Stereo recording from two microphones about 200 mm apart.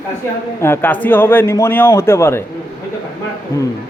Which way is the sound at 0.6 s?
10° left (ahead or behind).